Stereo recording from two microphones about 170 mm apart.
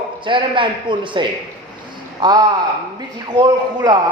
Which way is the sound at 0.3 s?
30° right (ahead or behind).